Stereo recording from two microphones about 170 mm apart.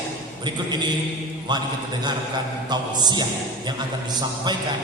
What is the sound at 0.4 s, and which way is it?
Speech, 25° right (ahead or behind).